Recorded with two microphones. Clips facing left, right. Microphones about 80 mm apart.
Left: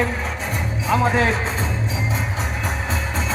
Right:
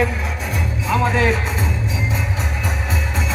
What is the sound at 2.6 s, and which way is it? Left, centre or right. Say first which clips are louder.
Music: right 1 dB; left.